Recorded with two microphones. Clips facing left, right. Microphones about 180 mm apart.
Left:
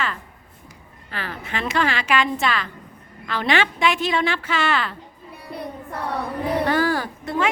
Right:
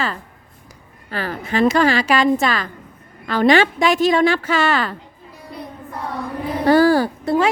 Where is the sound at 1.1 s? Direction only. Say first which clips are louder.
Right 8 dB; 40° right (ahead or behind).